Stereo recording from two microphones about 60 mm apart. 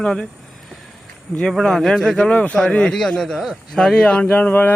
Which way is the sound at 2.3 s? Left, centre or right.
Left.